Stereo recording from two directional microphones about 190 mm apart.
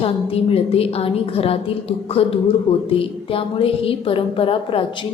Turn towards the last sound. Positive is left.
turn(degrees=25)  # may be behind; listen again after turning